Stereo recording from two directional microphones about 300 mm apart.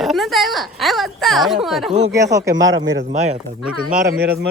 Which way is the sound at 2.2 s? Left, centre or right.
Centre.